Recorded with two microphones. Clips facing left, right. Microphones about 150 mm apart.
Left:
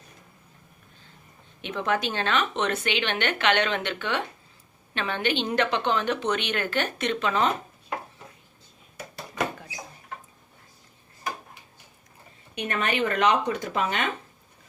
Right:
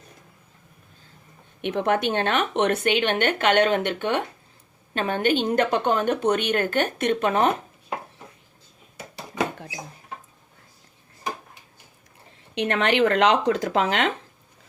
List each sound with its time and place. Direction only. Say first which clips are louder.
1.6 s speech: right 5 dB; 60° right (ahead or behind)
4.9 s speech: right 5 dB; 45° right (ahead or behind)
12.5 s speech: right 6 dB; 75° right (ahead or behind)